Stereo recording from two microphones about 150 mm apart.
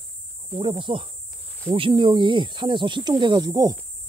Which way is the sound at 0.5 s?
35° right (ahead or behind).